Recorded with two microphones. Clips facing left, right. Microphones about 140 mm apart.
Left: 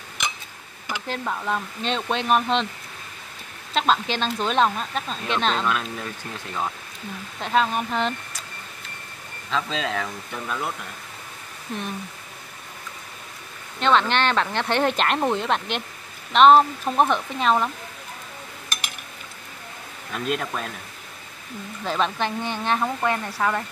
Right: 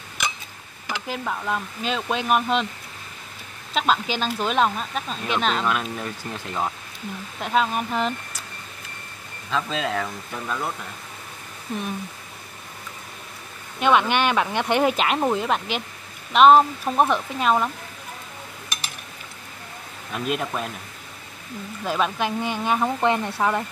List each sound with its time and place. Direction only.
1.0 s speech: 5° right (ahead or behind)
3.7 s speech: 5° right (ahead or behind)
7.3 s speech: 5° right (ahead or behind)
9.5 s speech: 5° right (ahead or behind)
13.7 s speech: 10° right (ahead or behind)
20.1 s speech: 5° right (ahead or behind)
21.8 s speech: 5° right (ahead or behind)
23.0 s speech: 20° right (ahead or behind)